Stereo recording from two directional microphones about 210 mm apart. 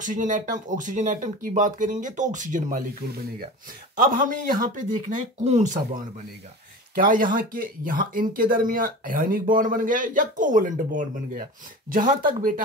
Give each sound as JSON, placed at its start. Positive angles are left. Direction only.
{"t": 0.0, "sound": "speech", "side_deg": -40}
{"t": 4.0, "sound": "speech", "side_deg": -40}